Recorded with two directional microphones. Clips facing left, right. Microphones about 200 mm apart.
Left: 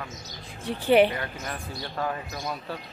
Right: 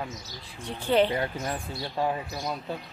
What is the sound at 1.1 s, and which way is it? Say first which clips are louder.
Speech: right 4 dB; 20° right (ahead or behind).